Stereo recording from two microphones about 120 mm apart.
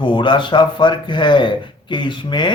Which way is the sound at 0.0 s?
40° left (ahead or behind).